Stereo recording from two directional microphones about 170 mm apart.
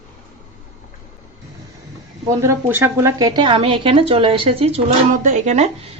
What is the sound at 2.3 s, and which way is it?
A woman's voice, 15° right (ahead or behind).